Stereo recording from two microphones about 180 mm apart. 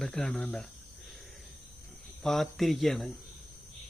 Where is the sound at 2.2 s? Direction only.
Centre (ahead or behind).